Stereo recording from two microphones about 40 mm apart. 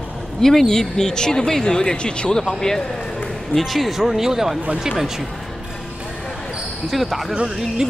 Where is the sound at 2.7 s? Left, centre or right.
Centre.